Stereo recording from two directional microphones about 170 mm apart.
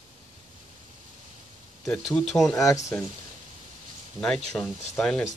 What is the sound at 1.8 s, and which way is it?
Speech, centre (ahead or behind).